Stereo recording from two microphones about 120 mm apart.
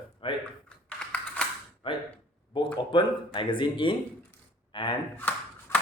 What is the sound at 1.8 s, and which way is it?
Speech, 45° left (ahead or behind).